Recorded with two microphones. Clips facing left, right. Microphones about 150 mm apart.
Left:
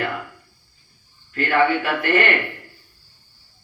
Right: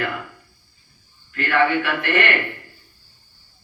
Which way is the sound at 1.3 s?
35° left (ahead or behind).